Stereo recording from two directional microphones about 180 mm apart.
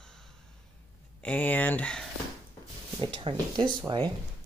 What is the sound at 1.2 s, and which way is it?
Speech, 10° left (ahead or behind).